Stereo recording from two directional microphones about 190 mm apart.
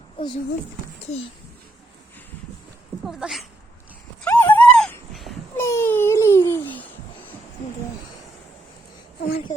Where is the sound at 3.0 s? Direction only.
Centre (ahead or behind).